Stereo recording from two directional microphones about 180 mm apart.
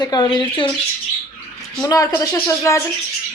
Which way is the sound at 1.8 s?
20° left (ahead or behind).